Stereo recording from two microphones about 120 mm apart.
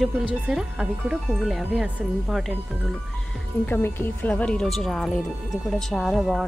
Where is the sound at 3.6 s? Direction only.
20° left (ahead or behind).